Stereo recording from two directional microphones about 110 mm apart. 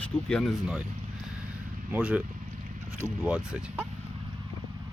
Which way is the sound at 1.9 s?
10° right (ahead or behind).